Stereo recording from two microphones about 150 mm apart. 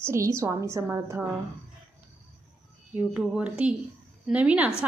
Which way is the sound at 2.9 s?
10° right (ahead or behind).